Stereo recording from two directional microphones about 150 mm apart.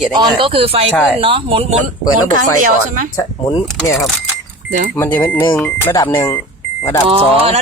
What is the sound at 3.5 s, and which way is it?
Speech, 25° left (ahead or behind).